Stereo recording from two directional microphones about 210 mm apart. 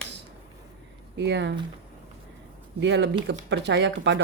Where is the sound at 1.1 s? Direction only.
55° right (ahead or behind).